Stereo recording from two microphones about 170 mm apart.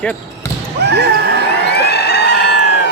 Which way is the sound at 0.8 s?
80° right.